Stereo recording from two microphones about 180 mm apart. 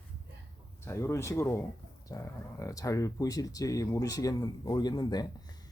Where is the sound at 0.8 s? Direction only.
15° left (ahead or behind).